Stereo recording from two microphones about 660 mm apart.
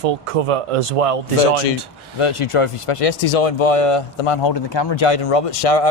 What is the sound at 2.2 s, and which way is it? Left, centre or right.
Speech, left.